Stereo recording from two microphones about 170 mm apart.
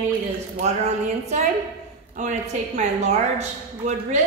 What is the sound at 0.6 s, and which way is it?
A woman's voice, 40° right (ahead or behind).